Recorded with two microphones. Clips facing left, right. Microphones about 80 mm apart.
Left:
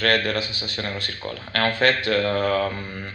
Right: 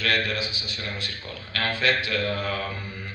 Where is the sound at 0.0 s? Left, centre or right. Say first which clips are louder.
Left 4 dB; left.